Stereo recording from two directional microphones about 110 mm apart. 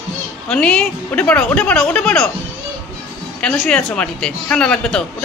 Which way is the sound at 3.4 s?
5° left (ahead or behind).